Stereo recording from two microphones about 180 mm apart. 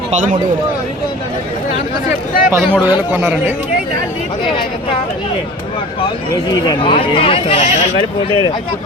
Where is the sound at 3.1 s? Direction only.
10° right (ahead or behind).